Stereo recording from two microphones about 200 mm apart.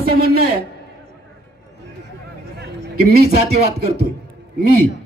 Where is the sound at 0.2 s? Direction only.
50° right (ahead or behind).